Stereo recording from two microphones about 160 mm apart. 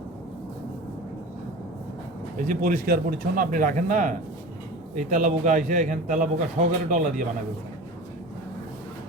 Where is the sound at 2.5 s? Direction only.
55° right (ahead or behind).